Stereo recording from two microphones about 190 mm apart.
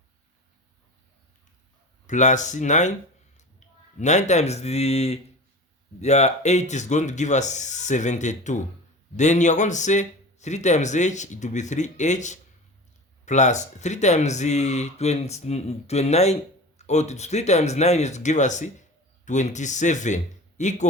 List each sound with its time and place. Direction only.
2.0 s speech: 40° left (ahead or behind)
3.9 s speech: 40° left (ahead or behind)